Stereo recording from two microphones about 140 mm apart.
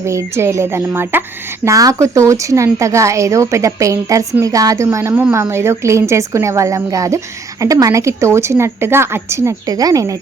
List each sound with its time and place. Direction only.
0.0 s speech: 20° right (ahead or behind)